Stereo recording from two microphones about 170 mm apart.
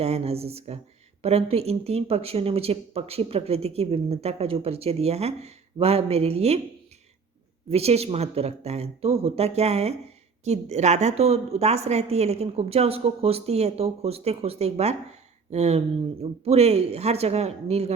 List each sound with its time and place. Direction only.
0.0 s speech: 35° right (ahead or behind)
7.7 s speech: 35° right (ahead or behind)